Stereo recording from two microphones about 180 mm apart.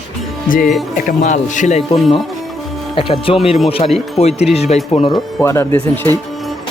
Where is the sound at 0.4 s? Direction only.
50° left (ahead or behind).